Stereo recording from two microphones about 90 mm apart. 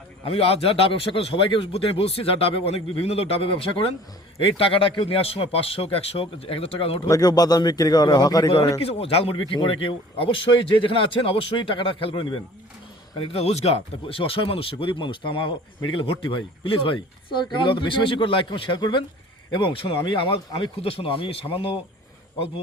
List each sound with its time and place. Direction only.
0.3 s a man's voice: 90° left
7.1 s a man's voice: 45° left (ahead or behind)
8.8 s speech: 90° left; by 12.4 s 65° left (ahead or behind)
13.1 s a man's voice: 90° left
20.7 s a man's voice: 90° left